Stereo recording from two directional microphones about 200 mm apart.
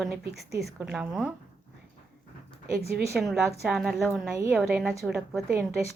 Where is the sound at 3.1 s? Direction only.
5° right (ahead or behind).